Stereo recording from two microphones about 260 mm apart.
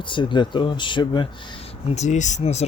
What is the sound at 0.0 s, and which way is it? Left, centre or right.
Speech, centre.